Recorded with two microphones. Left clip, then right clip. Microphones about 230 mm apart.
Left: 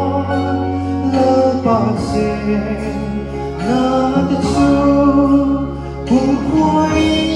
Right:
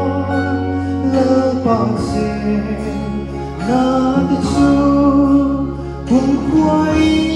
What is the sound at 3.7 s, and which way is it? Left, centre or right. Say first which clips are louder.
Music: even; left.